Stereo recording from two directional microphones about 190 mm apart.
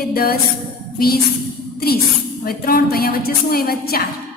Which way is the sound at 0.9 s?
50° left (ahead or behind).